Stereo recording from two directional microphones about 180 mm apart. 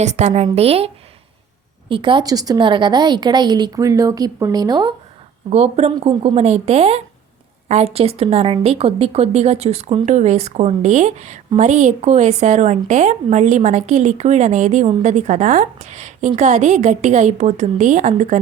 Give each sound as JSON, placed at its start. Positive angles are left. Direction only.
{"t": 0.0, "sound": "a woman's voice", "side_deg": -40}
{"t": 1.9, "sound": "a woman's voice", "side_deg": -25}
{"t": 5.5, "sound": "a woman's voice", "side_deg": -35}